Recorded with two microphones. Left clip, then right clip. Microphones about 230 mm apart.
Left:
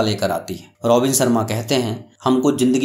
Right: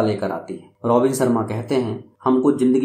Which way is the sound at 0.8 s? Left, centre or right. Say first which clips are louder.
Left 1 dB; left.